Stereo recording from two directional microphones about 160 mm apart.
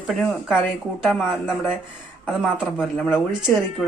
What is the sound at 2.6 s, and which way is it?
Speech, 5° right (ahead or behind).